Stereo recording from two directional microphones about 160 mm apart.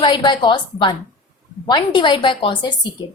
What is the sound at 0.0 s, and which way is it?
A woman's voice, 30° left (ahead or behind).